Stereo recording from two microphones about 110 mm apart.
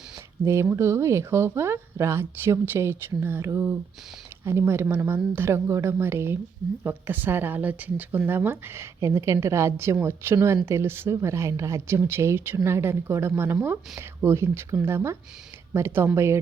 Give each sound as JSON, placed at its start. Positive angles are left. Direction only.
{"t": 0.4, "sound": "a woman's voice", "side_deg": -25}